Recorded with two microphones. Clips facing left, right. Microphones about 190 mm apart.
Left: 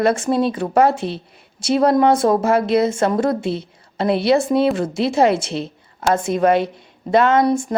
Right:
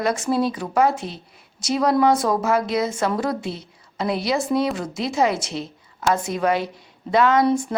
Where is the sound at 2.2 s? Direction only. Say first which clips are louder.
Left 5 dB; 25° left (ahead or behind).